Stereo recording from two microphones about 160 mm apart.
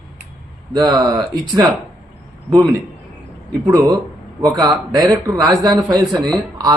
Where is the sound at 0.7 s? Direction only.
25° right (ahead or behind).